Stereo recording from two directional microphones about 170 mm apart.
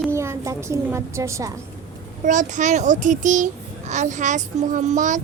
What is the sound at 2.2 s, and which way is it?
A child's voice, 50° right (ahead or behind).